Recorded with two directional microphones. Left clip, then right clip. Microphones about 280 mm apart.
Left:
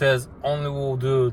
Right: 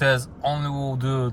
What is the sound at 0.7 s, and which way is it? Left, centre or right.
Speech, right.